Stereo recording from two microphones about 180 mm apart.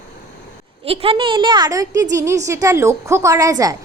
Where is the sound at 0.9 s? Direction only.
30° right (ahead or behind).